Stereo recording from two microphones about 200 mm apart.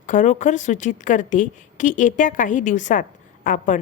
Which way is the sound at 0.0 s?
40° left (ahead or behind).